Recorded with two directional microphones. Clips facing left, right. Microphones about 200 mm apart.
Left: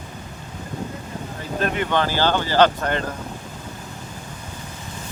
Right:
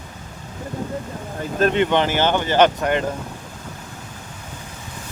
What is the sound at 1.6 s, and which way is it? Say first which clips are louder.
Speech: right 5 dB; 25° right (ahead or behind).